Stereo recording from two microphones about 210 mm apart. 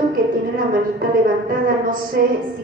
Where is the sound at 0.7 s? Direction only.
40° right (ahead or behind).